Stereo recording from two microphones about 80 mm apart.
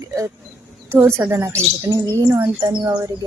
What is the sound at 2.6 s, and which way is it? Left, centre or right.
Speech, right.